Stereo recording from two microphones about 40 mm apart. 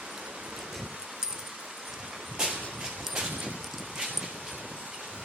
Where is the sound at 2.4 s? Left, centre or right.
Centre.